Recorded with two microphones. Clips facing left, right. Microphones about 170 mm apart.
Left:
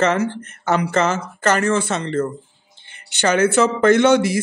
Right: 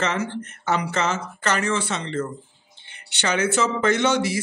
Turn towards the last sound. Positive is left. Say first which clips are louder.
# left 7 dB
turn(degrees=55)  # may be behind; listen again after turning